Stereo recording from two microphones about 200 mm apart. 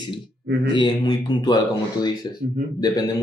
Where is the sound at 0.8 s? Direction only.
20° left (ahead or behind).